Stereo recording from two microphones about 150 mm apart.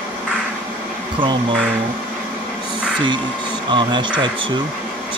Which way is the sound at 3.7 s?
30° right (ahead or behind).